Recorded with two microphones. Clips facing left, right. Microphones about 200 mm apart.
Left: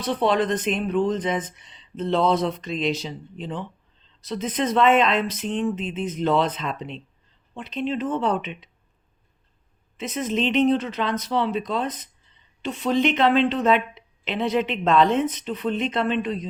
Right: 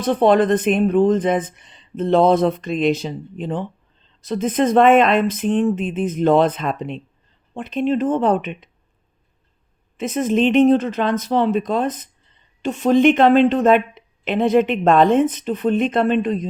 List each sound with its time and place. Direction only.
0.0 s a woman's voice: 50° right (ahead or behind)
10.0 s a woman's voice: 50° right (ahead or behind)